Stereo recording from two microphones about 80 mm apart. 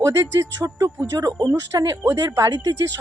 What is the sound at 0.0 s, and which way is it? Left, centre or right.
Speech, right.